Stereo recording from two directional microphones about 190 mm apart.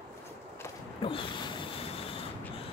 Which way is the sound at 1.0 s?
25° left (ahead or behind).